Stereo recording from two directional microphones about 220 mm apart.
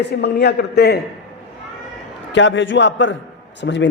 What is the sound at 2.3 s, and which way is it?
A man's voice, 55° left (ahead or behind).